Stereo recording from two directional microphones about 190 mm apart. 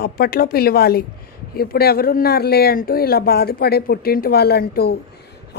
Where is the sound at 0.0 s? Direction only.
50° left (ahead or behind).